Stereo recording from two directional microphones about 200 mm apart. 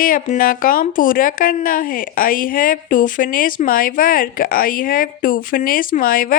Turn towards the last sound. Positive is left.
turn(degrees=45)  # may be behind; listen again after turning